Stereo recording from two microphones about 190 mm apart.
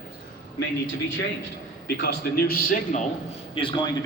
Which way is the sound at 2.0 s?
55° left (ahead or behind).